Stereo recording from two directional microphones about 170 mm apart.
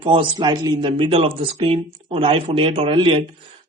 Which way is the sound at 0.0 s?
30° right (ahead or behind).